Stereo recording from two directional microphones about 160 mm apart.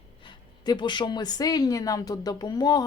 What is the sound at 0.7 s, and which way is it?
Speech, 30° left (ahead or behind).